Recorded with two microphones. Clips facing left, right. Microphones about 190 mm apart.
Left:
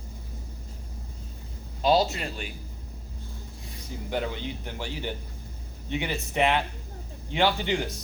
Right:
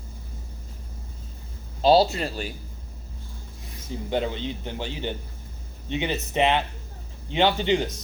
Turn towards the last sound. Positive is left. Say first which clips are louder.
# right 4 dB
turn(degrees=-20)  # may be behind; listen again after turning